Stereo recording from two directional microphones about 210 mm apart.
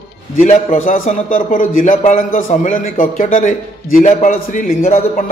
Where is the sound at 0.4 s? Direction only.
35° left (ahead or behind).